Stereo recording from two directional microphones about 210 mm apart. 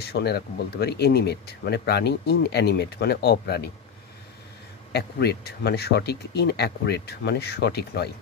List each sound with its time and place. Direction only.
0.0 s speech: 50° left (ahead or behind)
4.9 s speech: 50° left (ahead or behind)